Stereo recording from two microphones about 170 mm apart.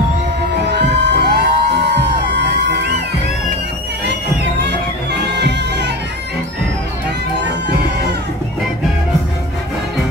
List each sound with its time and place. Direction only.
0.7 s music: 80° right
4.0 s music: 90° right